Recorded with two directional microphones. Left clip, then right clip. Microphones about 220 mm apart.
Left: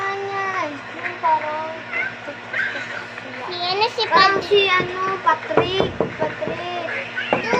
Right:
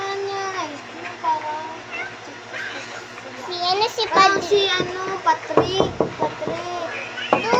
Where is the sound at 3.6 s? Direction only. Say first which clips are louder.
Even; 20° right (ahead or behind).